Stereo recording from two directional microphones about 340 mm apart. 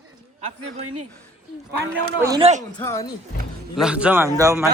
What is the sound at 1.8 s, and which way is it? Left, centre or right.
Speech, centre.